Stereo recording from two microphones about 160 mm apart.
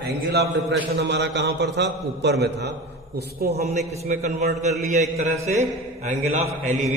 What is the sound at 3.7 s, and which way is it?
A man's voice, 45° right (ahead or behind).